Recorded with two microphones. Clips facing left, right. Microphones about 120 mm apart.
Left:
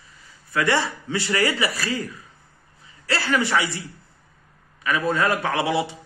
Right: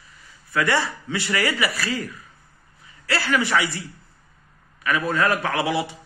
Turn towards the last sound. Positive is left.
turn(degrees=25)  # may be behind; listen again after turning